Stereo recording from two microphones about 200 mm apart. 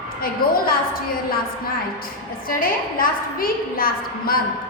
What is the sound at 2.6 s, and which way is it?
A woman's voice, 45° left (ahead or behind).